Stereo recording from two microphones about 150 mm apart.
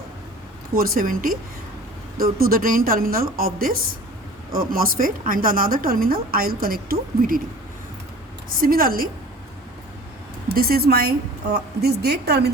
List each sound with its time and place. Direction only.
0.7 s a woman's voice: 75° right (ahead or behind)
2.1 s a woman's voice: 80° right
8.5 s a woman's voice: 75° right (ahead or behind)
10.5 s a woman's voice: 85° right